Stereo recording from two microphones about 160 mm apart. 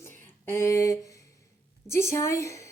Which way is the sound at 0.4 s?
15° left (ahead or behind).